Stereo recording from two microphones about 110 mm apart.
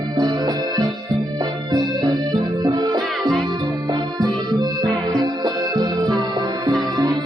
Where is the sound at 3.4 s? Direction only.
40° right (ahead or behind).